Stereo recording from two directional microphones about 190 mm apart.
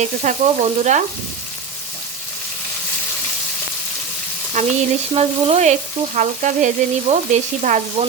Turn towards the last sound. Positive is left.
turn(degrees=-40)  # may be behind; listen again after turning